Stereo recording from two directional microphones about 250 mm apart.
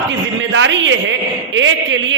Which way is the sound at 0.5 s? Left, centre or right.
Right.